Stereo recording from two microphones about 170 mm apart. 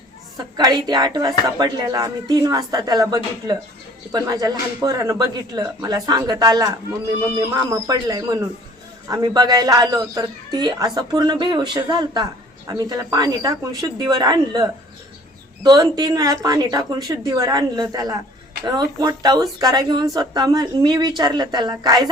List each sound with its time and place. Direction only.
0.5 s speech: 25° right (ahead or behind)